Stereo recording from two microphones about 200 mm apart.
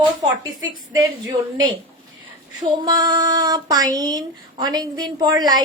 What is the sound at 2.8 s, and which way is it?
Speech, 20° right (ahead or behind).